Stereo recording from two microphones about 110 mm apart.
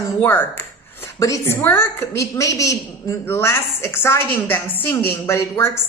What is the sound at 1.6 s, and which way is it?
Speech, 20° left (ahead or behind).